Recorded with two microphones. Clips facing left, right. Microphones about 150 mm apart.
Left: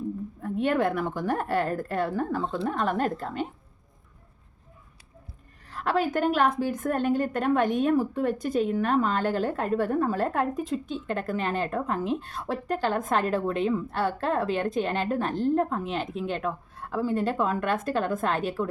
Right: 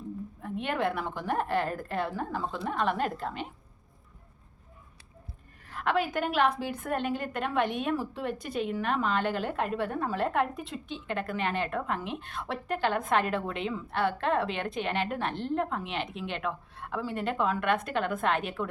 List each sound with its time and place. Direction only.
0.4 s a woman's voice: 45° left (ahead or behind)
5.6 s a woman's voice: 40° left (ahead or behind)